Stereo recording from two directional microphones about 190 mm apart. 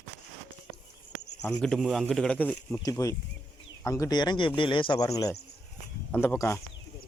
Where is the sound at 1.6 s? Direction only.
Centre (ahead or behind).